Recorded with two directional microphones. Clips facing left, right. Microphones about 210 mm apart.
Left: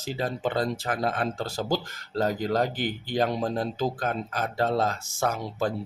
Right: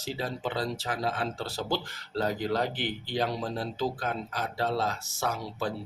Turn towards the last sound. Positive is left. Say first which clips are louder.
# left 4 dB
turn(degrees=50)  # may be behind; listen again after turning